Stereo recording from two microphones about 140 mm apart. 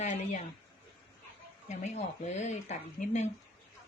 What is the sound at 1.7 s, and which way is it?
Speech, 55° left (ahead or behind).